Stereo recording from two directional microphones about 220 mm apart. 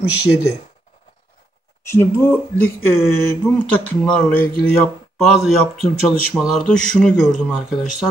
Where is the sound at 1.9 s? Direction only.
10° left (ahead or behind).